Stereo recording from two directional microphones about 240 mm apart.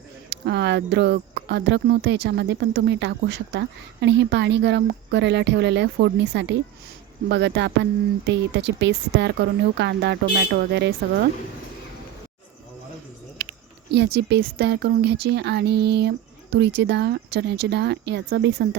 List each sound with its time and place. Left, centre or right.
0.3 s speech: right
13.4 s speech: right